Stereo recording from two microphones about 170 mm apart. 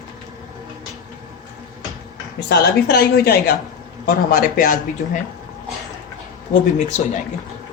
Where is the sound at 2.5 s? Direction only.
80° left; by 4.8 s 55° left (ahead or behind).